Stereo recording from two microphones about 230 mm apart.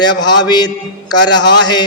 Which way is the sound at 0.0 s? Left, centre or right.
Centre.